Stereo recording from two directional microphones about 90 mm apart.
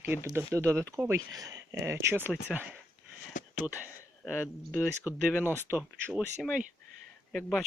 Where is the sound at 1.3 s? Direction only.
40° right (ahead or behind).